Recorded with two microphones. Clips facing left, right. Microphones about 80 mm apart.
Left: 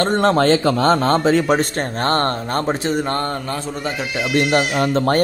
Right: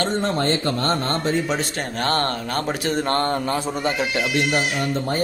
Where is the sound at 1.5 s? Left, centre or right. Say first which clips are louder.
Left 7 dB; left.